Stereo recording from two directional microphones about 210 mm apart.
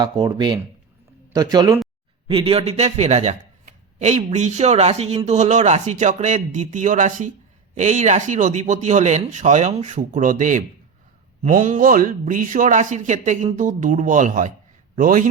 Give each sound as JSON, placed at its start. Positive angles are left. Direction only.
{"t": 0.0, "sound": "speech", "side_deg": -20}